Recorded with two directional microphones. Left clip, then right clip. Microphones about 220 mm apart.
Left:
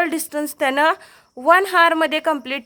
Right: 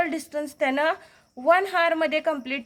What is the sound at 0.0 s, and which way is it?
A woman's voice, 45° left (ahead or behind).